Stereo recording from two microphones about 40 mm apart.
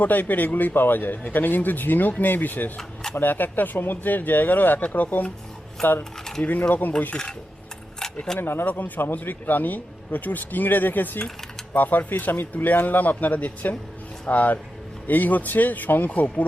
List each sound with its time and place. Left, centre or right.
0.0 s speech: left
2.7 s speech: centre
3.2 s speech: left
5.8 s speech: centre
6.4 s speech: left
8.4 s speech: left
8.6 s speech: left